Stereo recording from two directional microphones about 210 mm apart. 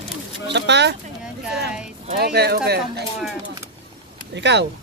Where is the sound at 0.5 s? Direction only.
55° right (ahead or behind).